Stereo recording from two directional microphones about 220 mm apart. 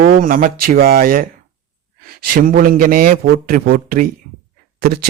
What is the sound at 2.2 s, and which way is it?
A man's voice, 40° right (ahead or behind).